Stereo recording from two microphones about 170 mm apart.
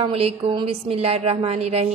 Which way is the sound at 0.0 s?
35° right (ahead or behind).